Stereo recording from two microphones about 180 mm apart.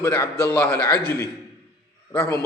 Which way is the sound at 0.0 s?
15° left (ahead or behind).